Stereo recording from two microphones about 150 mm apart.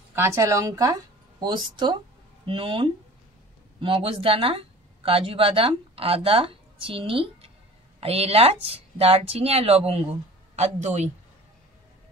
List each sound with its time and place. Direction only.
0.1 s speech: 15° right (ahead or behind); by 11.1 s 50° right (ahead or behind)